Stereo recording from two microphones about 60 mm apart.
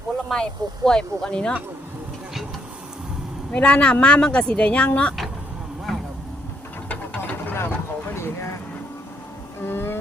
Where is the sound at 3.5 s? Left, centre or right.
Centre.